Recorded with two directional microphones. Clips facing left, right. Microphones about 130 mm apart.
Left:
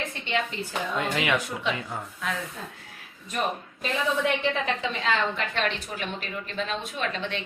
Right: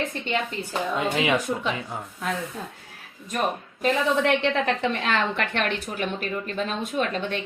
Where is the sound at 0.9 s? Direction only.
25° right (ahead or behind).